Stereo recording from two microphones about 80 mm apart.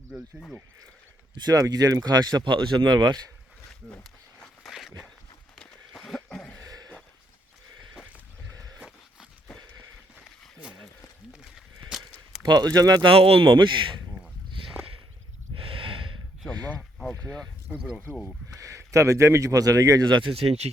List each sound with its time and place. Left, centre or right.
1.4 s speech: right
1.6 s speech: right
4.6 s a sound: centre
5.5 s a sound: centre
6.6 s a sound: right
8.5 s wild animals: right
12.4 s speech: right
13.0 s speech: right
15.5 s snort: right
16.4 s speech: centre
18.5 s speech: right
20.1 s speech: right